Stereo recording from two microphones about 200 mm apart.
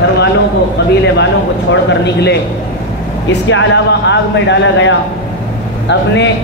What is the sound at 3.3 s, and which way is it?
Speech, 65° left (ahead or behind).